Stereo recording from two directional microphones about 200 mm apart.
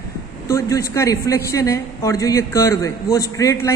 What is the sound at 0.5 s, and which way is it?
A man's voice, 15° left (ahead or behind).